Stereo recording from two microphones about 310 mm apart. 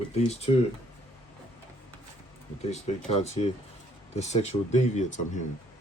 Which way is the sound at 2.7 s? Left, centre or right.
Left.